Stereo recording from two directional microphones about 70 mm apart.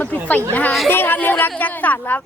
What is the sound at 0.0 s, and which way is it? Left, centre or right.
Speech, left.